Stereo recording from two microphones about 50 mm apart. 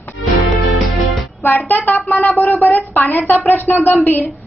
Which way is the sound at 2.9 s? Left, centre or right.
Left.